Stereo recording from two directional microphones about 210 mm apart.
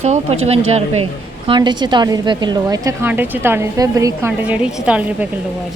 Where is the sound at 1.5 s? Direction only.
20° right (ahead or behind); by 5.3 s 5° right (ahead or behind).